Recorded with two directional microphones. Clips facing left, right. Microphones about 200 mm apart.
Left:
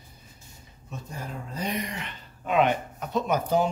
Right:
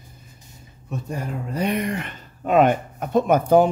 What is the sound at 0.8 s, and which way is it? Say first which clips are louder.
Speech: right 8 dB; 65° right (ahead or behind).